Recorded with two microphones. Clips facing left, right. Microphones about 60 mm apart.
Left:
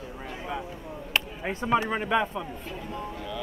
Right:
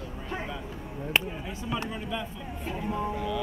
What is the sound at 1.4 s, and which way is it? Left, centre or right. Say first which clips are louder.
Speech: left 7 dB; left.